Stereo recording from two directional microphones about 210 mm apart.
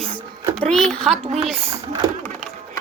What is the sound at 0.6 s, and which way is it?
Speech, 5° left (ahead or behind).